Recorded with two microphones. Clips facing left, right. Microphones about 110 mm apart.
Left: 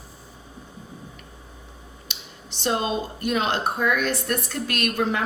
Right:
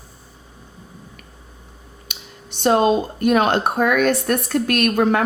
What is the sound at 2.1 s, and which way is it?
A woman's voice, 55° right (ahead or behind).